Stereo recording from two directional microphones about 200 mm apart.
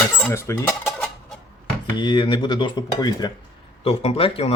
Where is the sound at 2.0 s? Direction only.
25° left (ahead or behind).